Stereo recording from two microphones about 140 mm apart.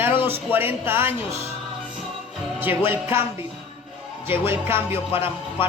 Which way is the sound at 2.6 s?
15° right (ahead or behind).